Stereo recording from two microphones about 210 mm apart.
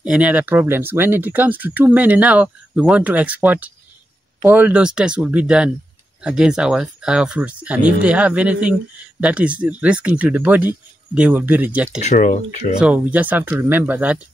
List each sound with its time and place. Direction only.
0.0 s speech: 5° right (ahead or behind)
12.0 s speech: 35° left (ahead or behind)
12.7 s speech: 5° right (ahead or behind)